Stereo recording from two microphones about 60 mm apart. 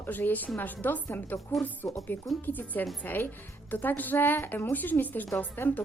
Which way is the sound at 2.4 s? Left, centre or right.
Left.